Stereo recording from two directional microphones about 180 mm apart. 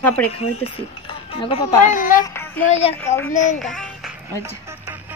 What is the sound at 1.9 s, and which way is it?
Speech, 50° left (ahead or behind).